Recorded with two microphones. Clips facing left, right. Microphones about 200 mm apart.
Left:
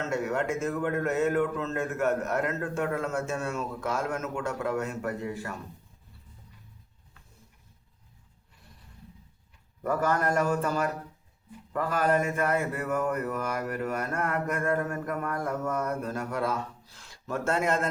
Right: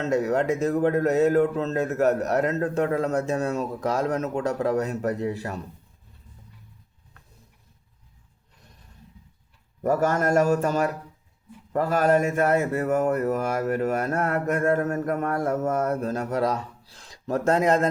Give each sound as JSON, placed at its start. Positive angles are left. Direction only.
{"t": 0.0, "sound": "speech", "side_deg": -35}
{"t": 9.8, "sound": "a man's voice", "side_deg": -45}
{"t": 11.7, "sound": "speech", "side_deg": -40}